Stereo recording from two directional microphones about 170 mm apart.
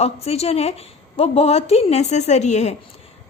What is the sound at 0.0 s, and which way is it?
A woman's voice, 40° left (ahead or behind).